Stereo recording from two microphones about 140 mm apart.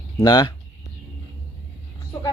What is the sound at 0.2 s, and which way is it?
Speech, 25° left (ahead or behind).